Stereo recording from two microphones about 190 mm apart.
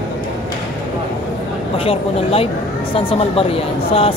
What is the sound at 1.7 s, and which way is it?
Speech, 30° left (ahead or behind).